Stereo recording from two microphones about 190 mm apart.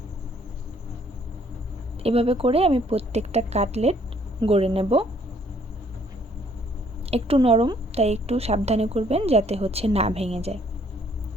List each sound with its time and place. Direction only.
2.0 s a woman's voice: 30° right (ahead or behind)
7.0 s a woman's voice: 30° right (ahead or behind)